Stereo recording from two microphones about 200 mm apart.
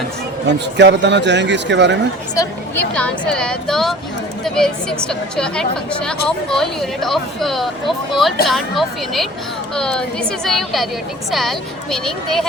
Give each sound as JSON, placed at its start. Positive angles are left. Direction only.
{"t": 0.6, "sound": "a man's voice", "side_deg": -60}
{"t": 2.3, "sound": "a woman's voice", "side_deg": 15}
{"t": 2.9, "sound": "a woman's voice", "side_deg": 5}